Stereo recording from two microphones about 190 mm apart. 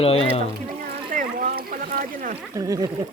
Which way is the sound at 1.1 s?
45° right (ahead or behind).